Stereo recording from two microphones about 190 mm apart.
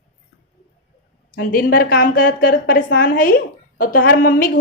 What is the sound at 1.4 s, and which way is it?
A woman's voice, 50° left (ahead or behind).